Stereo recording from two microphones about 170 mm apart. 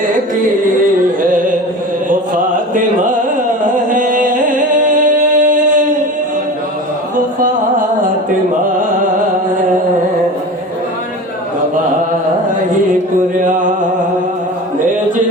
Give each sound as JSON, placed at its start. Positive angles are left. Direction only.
{"t": 2.7, "sound": "carnatic music", "side_deg": -50}
{"t": 3.8, "sound": "singing", "side_deg": -50}